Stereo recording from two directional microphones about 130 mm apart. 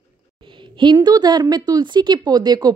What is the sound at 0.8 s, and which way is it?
Speech, 35° right (ahead or behind).